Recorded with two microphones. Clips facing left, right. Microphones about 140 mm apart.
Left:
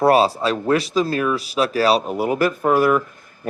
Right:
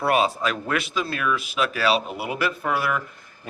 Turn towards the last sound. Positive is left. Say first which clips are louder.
# left 9 dB
turn(degrees=45)  # may be behind; listen again after turning